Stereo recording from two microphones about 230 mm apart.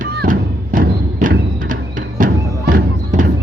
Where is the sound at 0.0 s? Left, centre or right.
Right.